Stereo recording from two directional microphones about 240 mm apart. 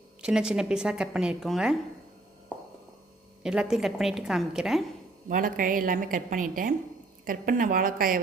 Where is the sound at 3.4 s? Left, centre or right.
Centre.